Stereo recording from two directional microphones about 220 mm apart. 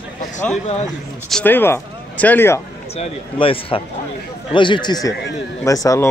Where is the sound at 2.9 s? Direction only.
25° left (ahead or behind).